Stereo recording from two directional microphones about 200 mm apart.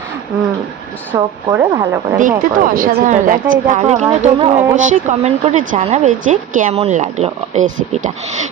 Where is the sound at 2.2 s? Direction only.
40° right (ahead or behind).